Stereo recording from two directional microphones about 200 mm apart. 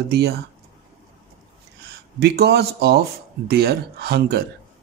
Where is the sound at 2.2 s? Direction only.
55° right (ahead or behind).